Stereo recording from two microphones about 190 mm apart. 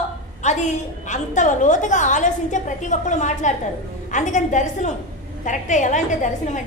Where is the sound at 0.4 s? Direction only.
40° left (ahead or behind).